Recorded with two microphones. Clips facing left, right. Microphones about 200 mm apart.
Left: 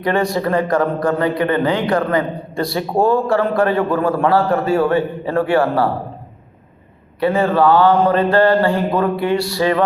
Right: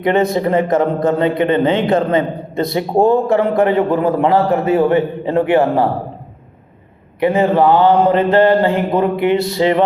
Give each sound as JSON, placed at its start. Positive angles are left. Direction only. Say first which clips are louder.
{"t": 0.0, "sound": "speech", "louder": "right 3 dB", "side_deg": -20}
{"t": 7.2, "sound": "speech", "louder": "right 2 dB", "side_deg": -20}